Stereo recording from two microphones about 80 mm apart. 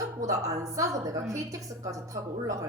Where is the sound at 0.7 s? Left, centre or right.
Right.